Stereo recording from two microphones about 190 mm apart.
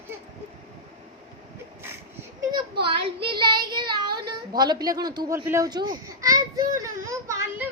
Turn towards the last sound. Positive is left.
turn(degrees=-15)  # may be behind; listen again after turning